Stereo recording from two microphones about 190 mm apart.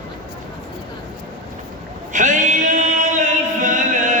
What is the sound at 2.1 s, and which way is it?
Music, 40° right (ahead or behind).